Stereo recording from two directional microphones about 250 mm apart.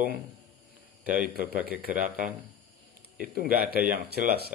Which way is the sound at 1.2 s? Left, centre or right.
Right.